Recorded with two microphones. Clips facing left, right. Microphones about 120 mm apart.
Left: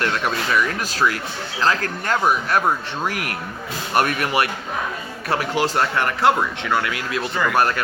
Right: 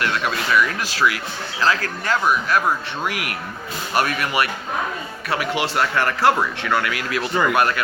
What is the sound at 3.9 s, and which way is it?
Speech, 50° left (ahead or behind).